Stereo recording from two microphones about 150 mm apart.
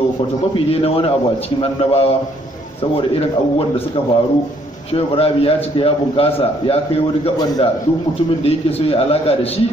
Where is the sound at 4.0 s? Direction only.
40° left (ahead or behind).